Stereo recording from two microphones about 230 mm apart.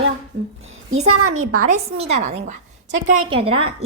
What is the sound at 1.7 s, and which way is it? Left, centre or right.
A child's voice, right.